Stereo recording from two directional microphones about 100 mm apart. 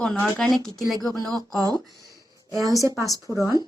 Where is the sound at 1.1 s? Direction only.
40° right (ahead or behind).